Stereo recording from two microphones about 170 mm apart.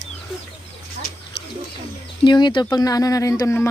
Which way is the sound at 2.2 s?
25° left (ahead or behind).